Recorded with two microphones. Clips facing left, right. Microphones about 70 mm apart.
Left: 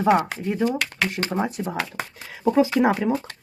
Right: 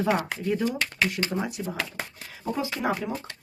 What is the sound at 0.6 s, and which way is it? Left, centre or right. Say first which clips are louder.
Speech: left 3 dB; left.